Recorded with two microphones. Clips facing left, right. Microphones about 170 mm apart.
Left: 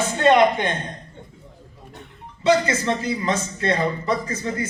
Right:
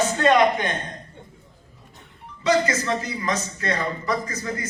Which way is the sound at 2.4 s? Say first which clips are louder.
Left 2 dB; 30° left (ahead or behind).